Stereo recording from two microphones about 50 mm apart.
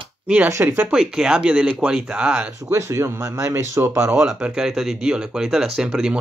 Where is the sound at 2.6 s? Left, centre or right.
Right.